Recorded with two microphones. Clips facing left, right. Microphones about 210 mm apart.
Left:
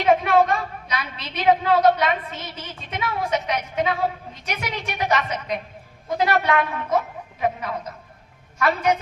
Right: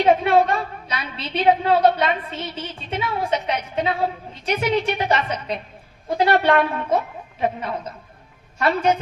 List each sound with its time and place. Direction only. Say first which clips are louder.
0.0 s a woman's voice: right 2 dB; 30° right (ahead or behind)